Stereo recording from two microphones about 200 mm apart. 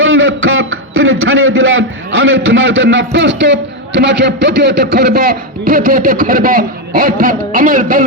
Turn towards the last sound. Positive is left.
turn(degrees=-40)  # may be behind; listen again after turning